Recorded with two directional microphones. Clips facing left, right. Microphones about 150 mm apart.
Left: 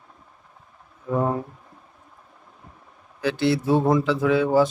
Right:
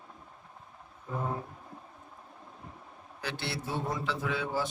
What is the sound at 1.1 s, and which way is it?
Mantra, 90° left.